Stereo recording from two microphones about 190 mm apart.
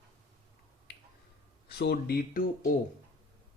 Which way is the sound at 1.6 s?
55° left (ahead or behind).